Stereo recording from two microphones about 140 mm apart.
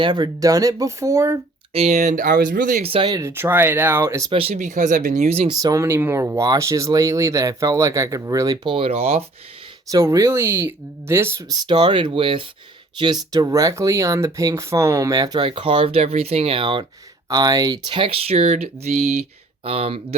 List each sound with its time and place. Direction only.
0.0 s speech: 30° right (ahead or behind)
1.7 s speech: 50° right (ahead or behind); by 2.8 s 70° right (ahead or behind)
2.8 s speech: 40° right (ahead or behind)
3.1 s speech: 20° right (ahead or behind)
4.3 s speech: 40° right (ahead or behind)
4.5 s speech: 60° right (ahead or behind)
5.6 s speech: 20° right (ahead or behind); by 9.2 s 45° right (ahead or behind)
9.9 s speech: 20° right (ahead or behind); by 16.8 s 35° right (ahead or behind)
17.2 s speech: 25° right (ahead or behind); by 20.1 s 45° right (ahead or behind)